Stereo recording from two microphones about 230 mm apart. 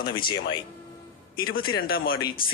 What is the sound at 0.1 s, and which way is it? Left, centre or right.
Speech, left.